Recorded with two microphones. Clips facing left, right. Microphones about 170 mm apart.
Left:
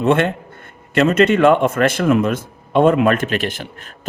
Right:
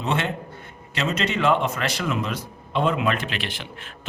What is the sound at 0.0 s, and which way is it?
A man's voice, 55° left (ahead or behind).